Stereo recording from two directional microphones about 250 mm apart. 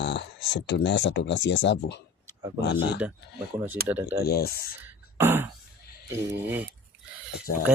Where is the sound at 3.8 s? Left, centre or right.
Right.